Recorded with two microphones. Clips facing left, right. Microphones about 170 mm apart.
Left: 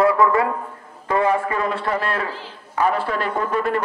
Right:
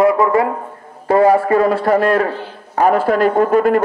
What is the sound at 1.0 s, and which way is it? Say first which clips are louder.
A man's voice: right 8 dB; 35° right (ahead or behind).